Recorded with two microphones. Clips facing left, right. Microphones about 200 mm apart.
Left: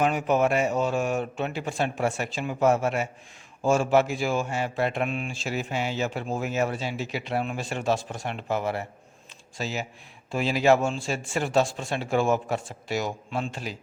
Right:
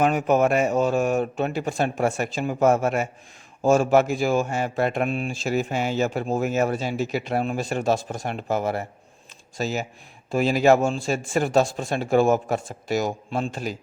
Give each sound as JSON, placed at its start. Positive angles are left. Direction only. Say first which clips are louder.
{"t": 0.0, "sound": "speech", "louder": "right 3 dB", "side_deg": -45}